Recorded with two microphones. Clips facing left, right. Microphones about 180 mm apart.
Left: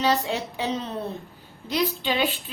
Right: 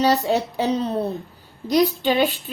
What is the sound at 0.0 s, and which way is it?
A woman's voice, 40° right (ahead or behind).